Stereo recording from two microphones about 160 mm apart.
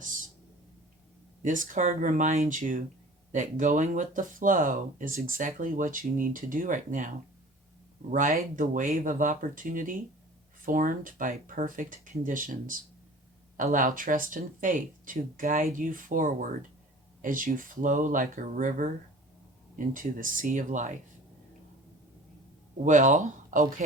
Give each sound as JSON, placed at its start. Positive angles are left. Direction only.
{"t": 1.4, "sound": "speech", "side_deg": -55}
{"t": 8.1, "sound": "speech", "side_deg": -55}
{"t": 19.9, "sound": "speech", "side_deg": -55}
{"t": 22.8, "sound": "speech", "side_deg": -50}